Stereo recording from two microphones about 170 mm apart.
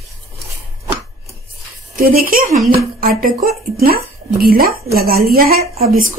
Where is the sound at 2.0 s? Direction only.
55° right (ahead or behind).